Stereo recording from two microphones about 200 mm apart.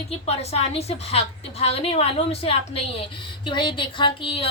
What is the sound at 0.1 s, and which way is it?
A woman's voice, 30° left (ahead or behind).